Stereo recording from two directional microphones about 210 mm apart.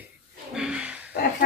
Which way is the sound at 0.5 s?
5° right (ahead or behind).